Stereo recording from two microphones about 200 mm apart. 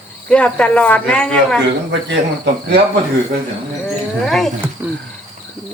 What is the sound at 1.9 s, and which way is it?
Speech, 60° right (ahead or behind).